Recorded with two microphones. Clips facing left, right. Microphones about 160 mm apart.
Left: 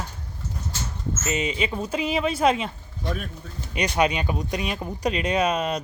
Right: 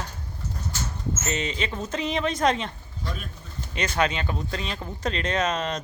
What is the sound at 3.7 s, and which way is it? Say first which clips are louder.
Speech: left 3 dB; 15° left (ahead or behind).